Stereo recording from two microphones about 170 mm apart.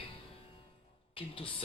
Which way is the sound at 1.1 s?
30° left (ahead or behind).